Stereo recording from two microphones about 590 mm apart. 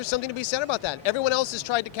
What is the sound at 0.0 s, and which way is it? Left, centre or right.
Speech, left.